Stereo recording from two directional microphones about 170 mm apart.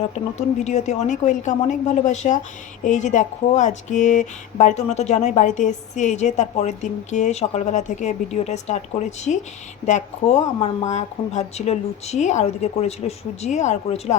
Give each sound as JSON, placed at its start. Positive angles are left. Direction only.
{"t": 0.3, "sound": "speech", "side_deg": 40}